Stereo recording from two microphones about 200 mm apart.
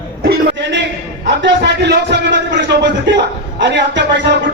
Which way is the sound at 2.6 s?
60° right (ahead or behind).